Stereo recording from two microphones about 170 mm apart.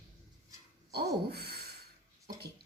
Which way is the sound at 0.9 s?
70° right (ahead or behind).